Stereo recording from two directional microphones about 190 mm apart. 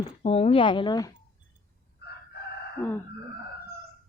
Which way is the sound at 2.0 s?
55° left (ahead or behind).